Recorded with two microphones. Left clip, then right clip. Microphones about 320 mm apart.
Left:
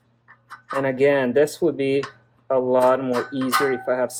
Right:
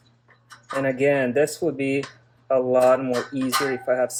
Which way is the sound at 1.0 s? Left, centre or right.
Centre.